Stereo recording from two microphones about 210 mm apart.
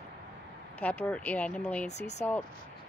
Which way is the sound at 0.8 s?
10° left (ahead or behind).